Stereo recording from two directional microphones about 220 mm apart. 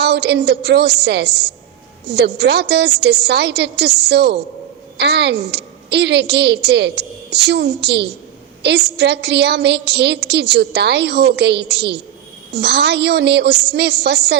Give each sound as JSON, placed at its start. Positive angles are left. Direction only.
{"t": 0.0, "sound": "a woman's voice", "side_deg": -50}